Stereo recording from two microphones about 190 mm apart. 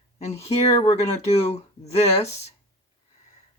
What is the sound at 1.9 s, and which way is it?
Speech, 35° left (ahead or behind).